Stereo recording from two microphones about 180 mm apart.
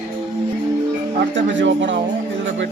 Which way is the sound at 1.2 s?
90° right.